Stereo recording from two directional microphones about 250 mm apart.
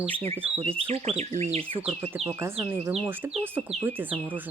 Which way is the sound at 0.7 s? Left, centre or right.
Right.